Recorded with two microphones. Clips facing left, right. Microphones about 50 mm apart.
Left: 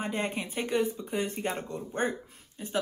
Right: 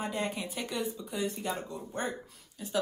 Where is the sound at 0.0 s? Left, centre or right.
Left.